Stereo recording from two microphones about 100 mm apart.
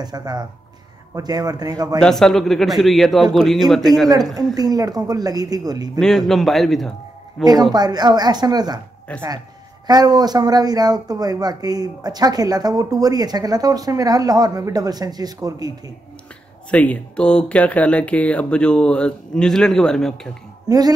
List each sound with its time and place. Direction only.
0.0 s speech: 40° right (ahead or behind)
2.0 s a man's voice: 5° left (ahead or behind)
4.6 s speech: 40° right (ahead or behind)
5.9 s a man's voice: centre (ahead or behind)
7.7 s a woman's voice: 45° right (ahead or behind)
9.1 s speech: 10° left (ahead or behind)
9.8 s speech: 40° right (ahead or behind)
16.7 s speech: 10° left (ahead or behind)
20.6 s speech: 40° right (ahead or behind)